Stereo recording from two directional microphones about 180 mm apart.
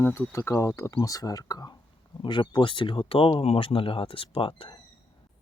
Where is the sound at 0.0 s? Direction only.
15° left (ahead or behind); by 4.8 s 30° left (ahead or behind).